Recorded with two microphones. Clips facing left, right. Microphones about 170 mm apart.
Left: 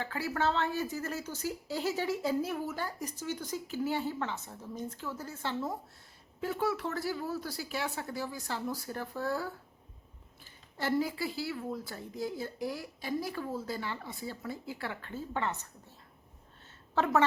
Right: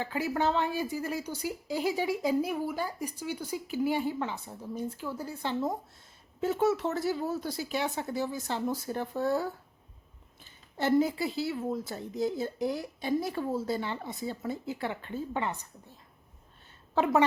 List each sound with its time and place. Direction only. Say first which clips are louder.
0.0 s a woman's voice: right 3 dB; 15° right (ahead or behind)
16.9 s a woman's voice: right 3 dB; 15° right (ahead or behind)